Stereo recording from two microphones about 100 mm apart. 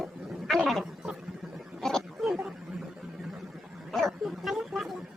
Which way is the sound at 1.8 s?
5° left (ahead or behind).